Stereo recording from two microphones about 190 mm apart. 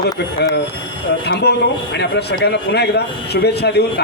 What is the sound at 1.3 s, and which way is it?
Speech, 60° left (ahead or behind).